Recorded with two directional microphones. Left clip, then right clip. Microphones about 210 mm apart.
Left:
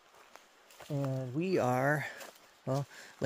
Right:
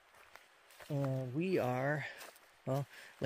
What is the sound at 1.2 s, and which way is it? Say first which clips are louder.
Speech: left 4 dB; 10° right (ahead or behind).